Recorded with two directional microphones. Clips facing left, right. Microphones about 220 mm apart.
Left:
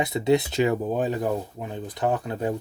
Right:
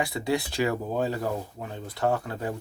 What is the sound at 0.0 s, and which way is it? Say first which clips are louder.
Speech: left 6 dB; 20° left (ahead or behind).